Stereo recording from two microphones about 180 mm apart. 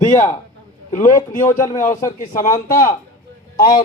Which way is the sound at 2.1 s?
45° left (ahead or behind).